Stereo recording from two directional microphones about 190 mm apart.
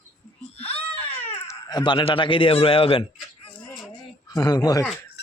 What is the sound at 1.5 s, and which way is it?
Speech, 20° left (ahead or behind).